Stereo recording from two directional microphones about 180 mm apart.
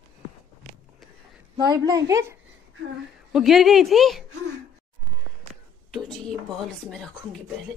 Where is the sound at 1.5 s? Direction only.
25° right (ahead or behind).